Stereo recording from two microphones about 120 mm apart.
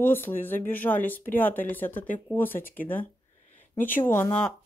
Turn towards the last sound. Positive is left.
turn(degrees=20)  # may be behind; listen again after turning